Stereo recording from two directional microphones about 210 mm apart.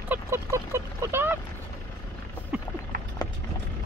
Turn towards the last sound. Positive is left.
turn(degrees=20)  # may be behind; listen again after turning